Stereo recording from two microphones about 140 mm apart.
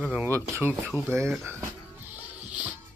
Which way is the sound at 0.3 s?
20° right (ahead or behind).